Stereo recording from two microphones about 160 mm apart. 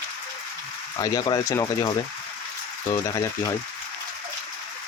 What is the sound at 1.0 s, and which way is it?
Speech, 25° left (ahead or behind).